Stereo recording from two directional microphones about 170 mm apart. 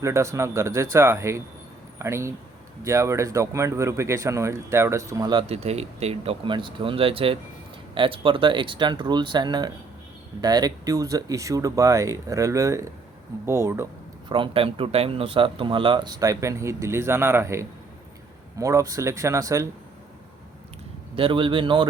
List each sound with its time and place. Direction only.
0.0 s speech: 15° right (ahead or behind)
14.3 s speech: 30° right (ahead or behind)
21.2 s speech: 30° right (ahead or behind)